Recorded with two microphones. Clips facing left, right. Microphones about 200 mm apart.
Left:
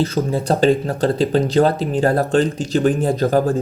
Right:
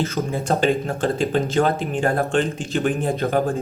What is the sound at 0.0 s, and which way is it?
Speech, 35° left (ahead or behind).